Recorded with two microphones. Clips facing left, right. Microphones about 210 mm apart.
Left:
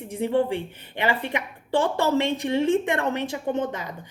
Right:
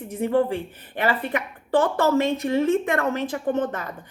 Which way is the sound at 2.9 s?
30° left (ahead or behind).